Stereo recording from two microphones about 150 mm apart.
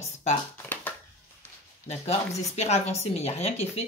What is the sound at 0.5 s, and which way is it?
Speech, 15° left (ahead or behind).